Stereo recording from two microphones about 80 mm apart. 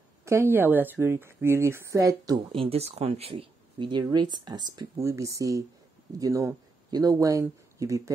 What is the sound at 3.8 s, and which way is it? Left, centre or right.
Speech, right.